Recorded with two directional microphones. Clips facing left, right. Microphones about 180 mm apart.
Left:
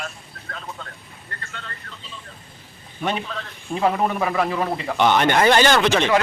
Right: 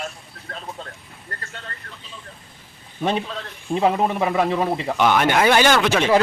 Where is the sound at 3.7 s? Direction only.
20° right (ahead or behind).